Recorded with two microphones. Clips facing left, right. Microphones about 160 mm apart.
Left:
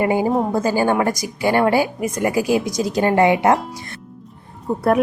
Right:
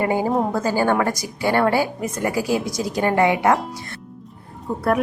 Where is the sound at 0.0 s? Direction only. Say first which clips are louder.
Left 2 dB; 15° left (ahead or behind).